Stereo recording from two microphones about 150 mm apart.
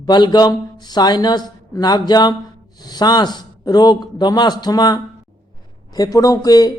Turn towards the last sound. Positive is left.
turn(degrees=25)  # may be behind; listen again after turning